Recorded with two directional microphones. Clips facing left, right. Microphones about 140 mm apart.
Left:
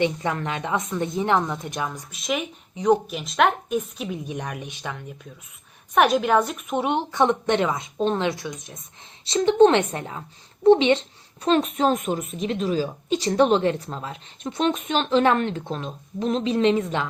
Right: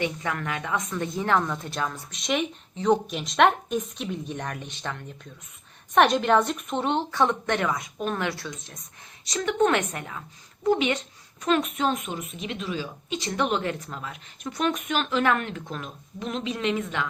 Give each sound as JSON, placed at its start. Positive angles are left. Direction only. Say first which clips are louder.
{"t": 0.0, "sound": "a woman's voice", "louder": "left 5 dB", "side_deg": 25}
{"t": 2.1, "sound": "a woman's voice", "louder": "right 1 dB", "side_deg": 5}
{"t": 9.2, "sound": "a woman's voice", "louder": "left 7 dB", "side_deg": 30}